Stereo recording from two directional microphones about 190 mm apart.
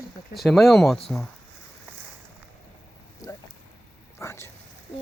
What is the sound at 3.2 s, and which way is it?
Speech, 20° left (ahead or behind).